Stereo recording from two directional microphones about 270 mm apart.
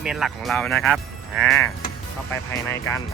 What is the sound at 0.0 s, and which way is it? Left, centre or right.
Speech, centre.